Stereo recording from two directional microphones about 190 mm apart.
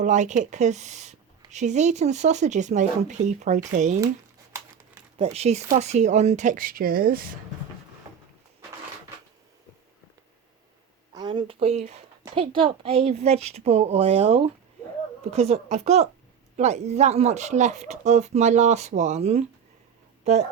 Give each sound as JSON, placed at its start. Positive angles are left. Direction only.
{"t": 0.0, "sound": "speech", "side_deg": -40}
{"t": 5.1, "sound": "speech", "side_deg": -30}
{"t": 11.1, "sound": "speech", "side_deg": -20}